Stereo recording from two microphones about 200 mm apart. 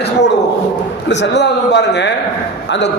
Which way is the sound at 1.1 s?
60° left (ahead or behind).